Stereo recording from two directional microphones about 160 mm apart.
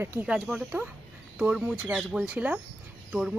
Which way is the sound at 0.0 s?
10° right (ahead or behind).